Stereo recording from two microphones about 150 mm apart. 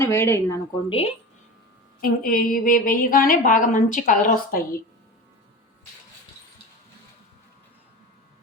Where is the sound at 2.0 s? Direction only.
70° left (ahead or behind).